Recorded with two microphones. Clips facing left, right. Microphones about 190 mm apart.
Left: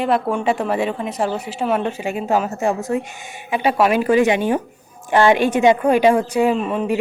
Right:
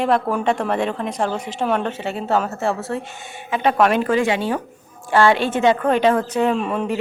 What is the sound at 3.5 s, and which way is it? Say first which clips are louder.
Speech: even; 5° left (ahead or behind).